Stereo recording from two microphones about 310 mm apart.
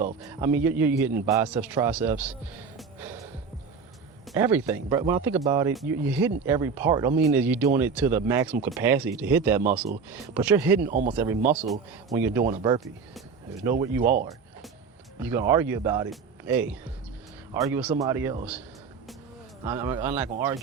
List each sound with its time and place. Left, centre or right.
0.0 s a man's voice: centre
2.7 s gasp: centre
4.3 s a man's voice: centre
14.0 s speech: right
15.2 s a man's voice: centre
19.6 s a man's voice: centre